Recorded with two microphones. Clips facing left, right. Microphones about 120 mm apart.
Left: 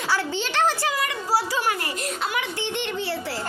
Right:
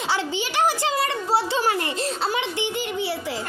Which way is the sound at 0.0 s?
20° right (ahead or behind).